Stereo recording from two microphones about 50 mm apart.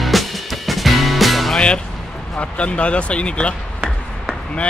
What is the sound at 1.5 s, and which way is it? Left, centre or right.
Music, left.